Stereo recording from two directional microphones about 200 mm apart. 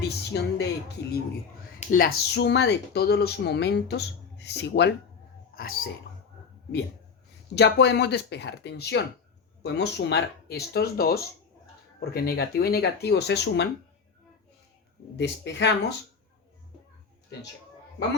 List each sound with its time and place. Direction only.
0.1 s speech: 55° left (ahead or behind)
1.8 s speech: 45° left (ahead or behind); by 4.9 s 60° left (ahead or behind)
7.5 s speech: 60° left (ahead or behind)
15.1 s speech: 60° left (ahead or behind)